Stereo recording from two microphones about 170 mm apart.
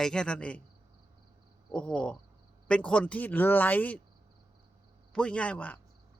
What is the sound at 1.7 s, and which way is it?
Speech, 5° left (ahead or behind).